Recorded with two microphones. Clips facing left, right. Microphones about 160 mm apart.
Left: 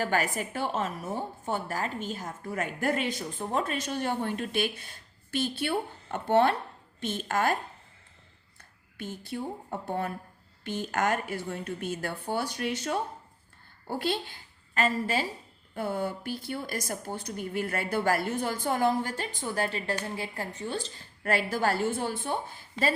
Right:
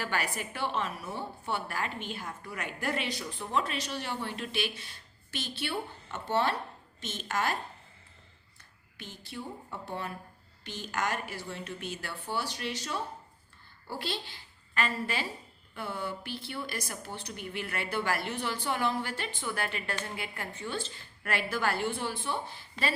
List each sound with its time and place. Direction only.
0.0 s a woman's voice: 45° left (ahead or behind)
9.0 s a woman's voice: 50° left (ahead or behind)